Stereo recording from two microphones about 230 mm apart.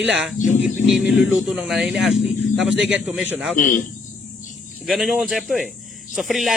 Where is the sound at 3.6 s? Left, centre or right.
Left.